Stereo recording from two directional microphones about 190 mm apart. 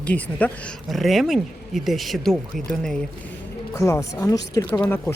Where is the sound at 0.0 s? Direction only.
5° left (ahead or behind).